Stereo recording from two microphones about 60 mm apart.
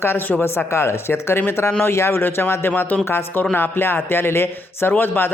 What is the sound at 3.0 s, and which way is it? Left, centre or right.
A man's voice, left.